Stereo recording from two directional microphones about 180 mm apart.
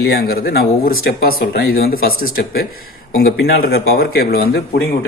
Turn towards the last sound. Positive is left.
turn(degrees=60)  # may be behind; listen again after turning